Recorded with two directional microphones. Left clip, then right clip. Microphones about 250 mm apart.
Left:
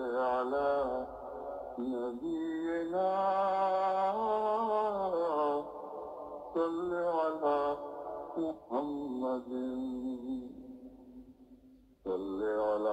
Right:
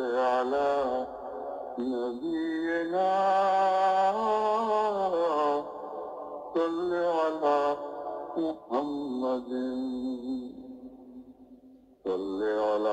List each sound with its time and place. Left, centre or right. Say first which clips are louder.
0.0 s mantra: right 5 dB; right
12.0 s mantra: right 5 dB; right